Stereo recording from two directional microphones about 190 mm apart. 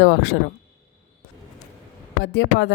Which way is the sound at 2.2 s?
65° left (ahead or behind).